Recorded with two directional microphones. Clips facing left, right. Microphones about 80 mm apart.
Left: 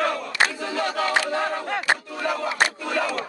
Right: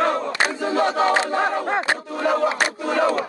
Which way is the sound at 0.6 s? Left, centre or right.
Right.